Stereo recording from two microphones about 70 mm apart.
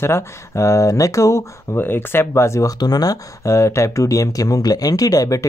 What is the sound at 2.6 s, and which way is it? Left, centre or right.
Speech, left.